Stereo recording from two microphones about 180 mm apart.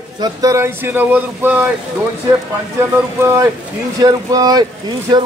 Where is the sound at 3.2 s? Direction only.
15° right (ahead or behind).